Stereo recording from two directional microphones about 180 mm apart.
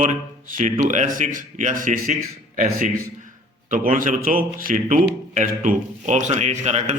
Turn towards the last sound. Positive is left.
turn(degrees=-40)  # may be behind; listen again after turning